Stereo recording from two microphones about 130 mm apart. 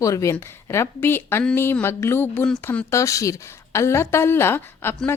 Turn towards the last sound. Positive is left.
turn(degrees=15)  # may be behind; listen again after turning